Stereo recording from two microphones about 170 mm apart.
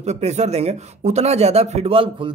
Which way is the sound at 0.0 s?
40° right (ahead or behind).